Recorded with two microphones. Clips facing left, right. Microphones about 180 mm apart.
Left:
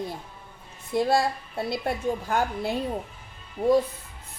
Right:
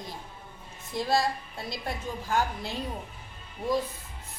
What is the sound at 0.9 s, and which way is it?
A woman's voice, 60° left (ahead or behind).